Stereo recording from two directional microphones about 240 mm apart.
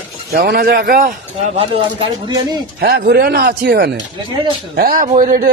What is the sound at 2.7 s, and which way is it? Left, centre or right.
A man's voice, right.